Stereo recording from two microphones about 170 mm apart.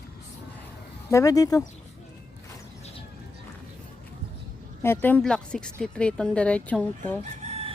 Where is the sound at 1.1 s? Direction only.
20° left (ahead or behind).